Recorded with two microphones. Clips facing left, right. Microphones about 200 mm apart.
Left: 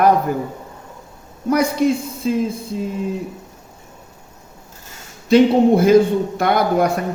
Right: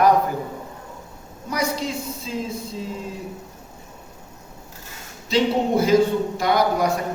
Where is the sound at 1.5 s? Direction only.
55° left (ahead or behind).